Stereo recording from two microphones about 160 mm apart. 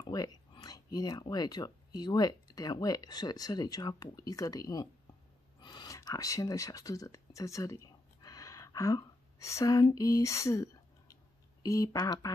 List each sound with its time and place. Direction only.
0.0 s speech: 25° left (ahead or behind)